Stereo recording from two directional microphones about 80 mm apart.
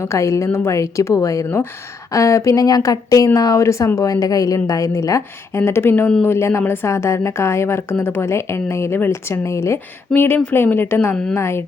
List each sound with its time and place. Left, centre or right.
0.0 s a woman's voice: left
5.5 s a woman's voice: left
10.2 s a woman's voice: left